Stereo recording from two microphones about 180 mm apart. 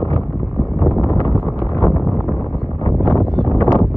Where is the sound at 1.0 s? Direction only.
15° left (ahead or behind).